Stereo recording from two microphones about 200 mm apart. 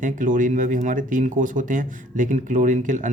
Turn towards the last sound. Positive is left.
turn(degrees=-40)  # may be behind; listen again after turning